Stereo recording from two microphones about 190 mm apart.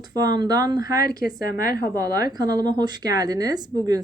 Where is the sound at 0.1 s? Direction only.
20° right (ahead or behind).